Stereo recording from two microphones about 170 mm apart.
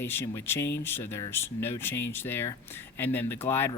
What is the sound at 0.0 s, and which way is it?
Speech, 15° left (ahead or behind).